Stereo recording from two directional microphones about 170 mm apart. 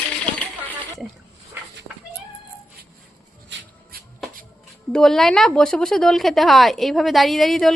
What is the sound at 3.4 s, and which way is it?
Writing, 60° right (ahead or behind).